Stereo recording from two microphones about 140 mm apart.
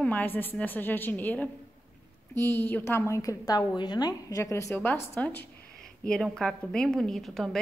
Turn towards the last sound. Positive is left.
turn(degrees=0)  # may be behind; listen again after turning